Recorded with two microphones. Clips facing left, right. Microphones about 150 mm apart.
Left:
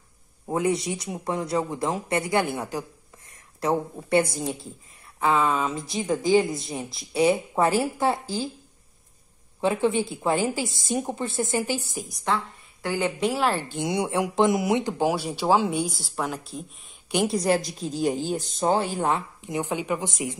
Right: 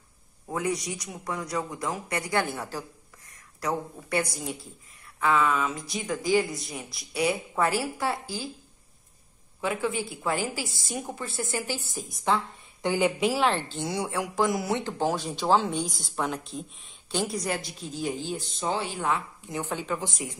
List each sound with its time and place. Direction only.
0.5 s speech: 25° left (ahead or behind)
9.6 s speech: 25° left (ahead or behind)
12.1 s a woman's voice: centre (ahead or behind)
12.8 s a woman's voice: 15° right (ahead or behind)
13.2 s speech: centre (ahead or behind)
17.3 s speech: 35° left (ahead or behind)
19.4 s speech: 20° left (ahead or behind)